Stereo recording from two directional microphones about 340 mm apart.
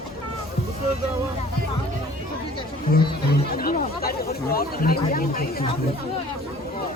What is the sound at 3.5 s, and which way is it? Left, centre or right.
Speech, left.